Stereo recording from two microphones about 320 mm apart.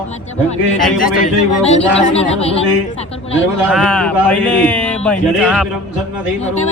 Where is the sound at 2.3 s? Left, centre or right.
Centre.